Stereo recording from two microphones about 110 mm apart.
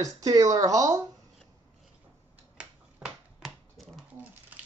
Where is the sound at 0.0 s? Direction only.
30° right (ahead or behind).